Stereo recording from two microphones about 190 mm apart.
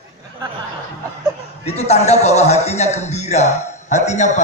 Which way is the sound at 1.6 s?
35° left (ahead or behind).